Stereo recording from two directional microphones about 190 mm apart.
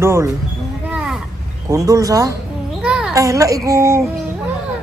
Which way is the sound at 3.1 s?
15° right (ahead or behind).